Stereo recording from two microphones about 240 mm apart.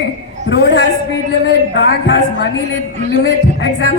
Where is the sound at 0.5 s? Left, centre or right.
Left.